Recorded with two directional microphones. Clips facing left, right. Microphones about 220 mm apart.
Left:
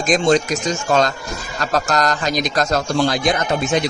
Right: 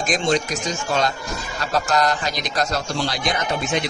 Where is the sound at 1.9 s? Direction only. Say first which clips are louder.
Left 2 dB; 45° left (ahead or behind).